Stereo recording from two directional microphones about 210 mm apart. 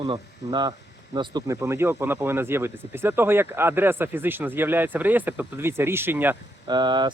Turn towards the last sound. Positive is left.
turn(degrees=-20)  # may be behind; listen again after turning